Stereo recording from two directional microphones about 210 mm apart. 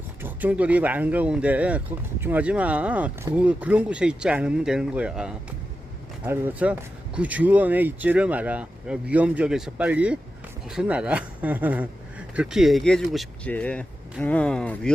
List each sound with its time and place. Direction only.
0.2 s speech: 10° right (ahead or behind)